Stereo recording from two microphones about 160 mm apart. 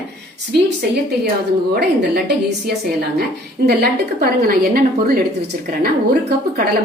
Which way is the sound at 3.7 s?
75° right (ahead or behind).